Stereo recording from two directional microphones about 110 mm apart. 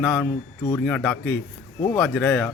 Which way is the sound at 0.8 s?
10° left (ahead or behind).